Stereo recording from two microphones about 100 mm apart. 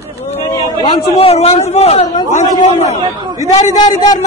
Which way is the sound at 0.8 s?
65° left (ahead or behind).